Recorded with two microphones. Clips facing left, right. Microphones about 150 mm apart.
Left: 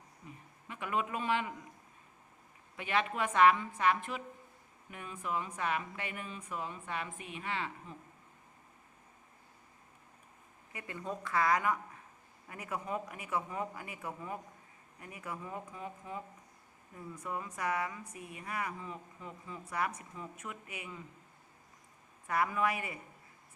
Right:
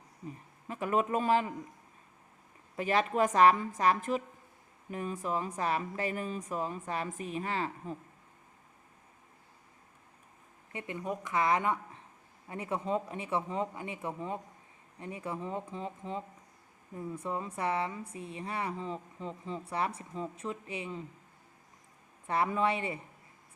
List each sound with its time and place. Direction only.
0.7 s speech: 40° right (ahead or behind)
2.7 s speech: 40° right (ahead or behind)
10.7 s speech: 25° right (ahead or behind)
22.3 s speech: 30° right (ahead or behind)